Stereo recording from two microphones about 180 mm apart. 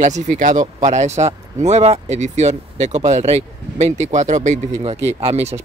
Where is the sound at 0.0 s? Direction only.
45° right (ahead or behind).